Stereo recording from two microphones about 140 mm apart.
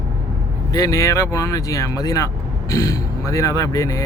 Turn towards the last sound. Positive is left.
turn(degrees=25)  # may be behind; listen again after turning